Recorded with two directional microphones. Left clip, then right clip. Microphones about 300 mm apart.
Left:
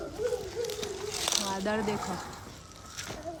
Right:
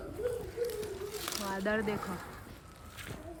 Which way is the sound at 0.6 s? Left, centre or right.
Centre.